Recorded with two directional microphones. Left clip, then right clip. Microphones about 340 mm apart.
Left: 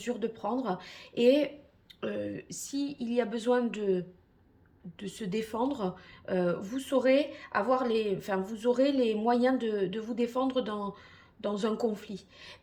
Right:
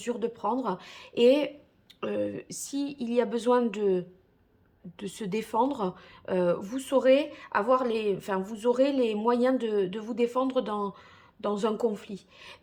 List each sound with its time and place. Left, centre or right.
0.0 s speech: centre